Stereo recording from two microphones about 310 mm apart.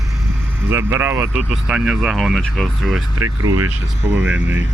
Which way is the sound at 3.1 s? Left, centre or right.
Right.